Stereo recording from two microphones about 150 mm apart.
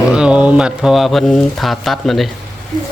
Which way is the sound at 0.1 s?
5° right (ahead or behind).